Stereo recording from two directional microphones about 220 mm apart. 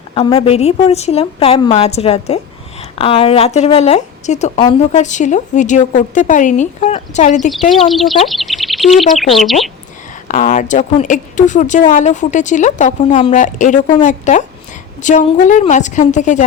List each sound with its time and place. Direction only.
0.1 s a woman's voice: 25° left (ahead or behind)
7.7 s speech: centre (ahead or behind)
10.2 s a woman's voice: 35° left (ahead or behind)